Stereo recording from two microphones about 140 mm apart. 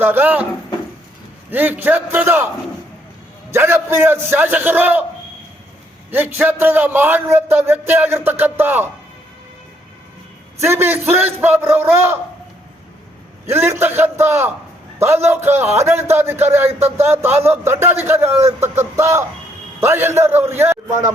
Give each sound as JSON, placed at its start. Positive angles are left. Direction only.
{"t": 0.0, "sound": "a man's voice", "side_deg": -15}
{"t": 1.5, "sound": "a man's voice", "side_deg": -15}
{"t": 3.5, "sound": "a man's voice", "side_deg": -15}
{"t": 6.1, "sound": "a man's voice", "side_deg": -15}
{"t": 10.6, "sound": "a man's voice", "side_deg": -15}
{"t": 13.5, "sound": "a man's voice", "side_deg": -20}